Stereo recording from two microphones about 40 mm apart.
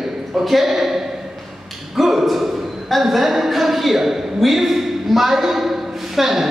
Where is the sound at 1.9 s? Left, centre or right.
Centre.